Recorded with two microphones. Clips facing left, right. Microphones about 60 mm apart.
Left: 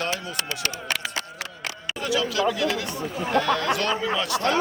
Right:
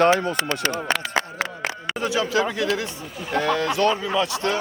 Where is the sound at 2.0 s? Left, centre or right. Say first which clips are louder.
Right 1 dB; right.